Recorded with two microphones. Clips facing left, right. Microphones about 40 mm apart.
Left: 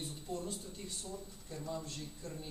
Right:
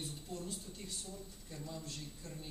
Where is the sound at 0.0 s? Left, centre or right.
Centre.